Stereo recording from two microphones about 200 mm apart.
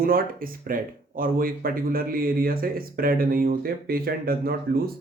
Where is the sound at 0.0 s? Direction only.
45° right (ahead or behind).